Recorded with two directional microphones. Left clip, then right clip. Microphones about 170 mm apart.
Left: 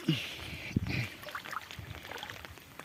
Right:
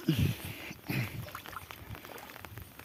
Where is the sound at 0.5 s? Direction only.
20° right (ahead or behind).